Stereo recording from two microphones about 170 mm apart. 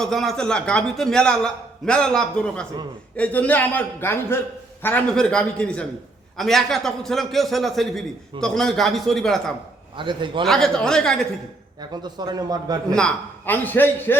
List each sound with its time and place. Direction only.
0.0 s a man's voice: centre (ahead or behind)
10.0 s speech: 30° right (ahead or behind)
10.4 s a man's voice: centre (ahead or behind)
11.8 s speech: 25° right (ahead or behind)
12.9 s a man's voice: 5° left (ahead or behind)